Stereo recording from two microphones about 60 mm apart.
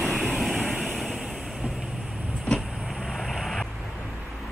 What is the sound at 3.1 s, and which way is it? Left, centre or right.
Vehicle, centre.